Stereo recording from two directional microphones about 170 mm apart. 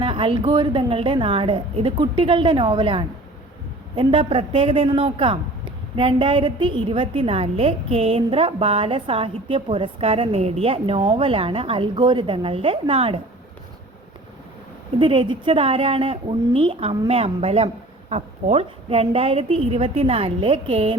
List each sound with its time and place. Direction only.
0.0 s a man's voice: 30° right (ahead or behind)
14.9 s a man's voice: 30° right (ahead or behind)